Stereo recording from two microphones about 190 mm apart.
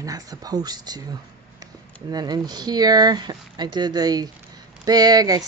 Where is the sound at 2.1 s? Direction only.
20° right (ahead or behind).